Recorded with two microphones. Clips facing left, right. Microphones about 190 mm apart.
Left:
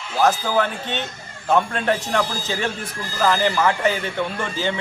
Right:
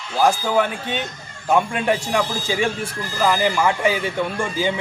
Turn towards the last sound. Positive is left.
turn(degrees=-10)  # may be behind; listen again after turning